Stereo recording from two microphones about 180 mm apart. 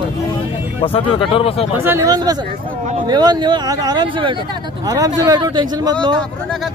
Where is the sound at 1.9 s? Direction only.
20° right (ahead or behind).